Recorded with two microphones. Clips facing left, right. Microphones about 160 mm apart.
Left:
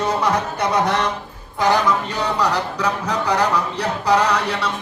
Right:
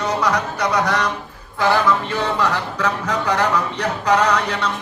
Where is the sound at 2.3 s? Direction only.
10° left (ahead or behind).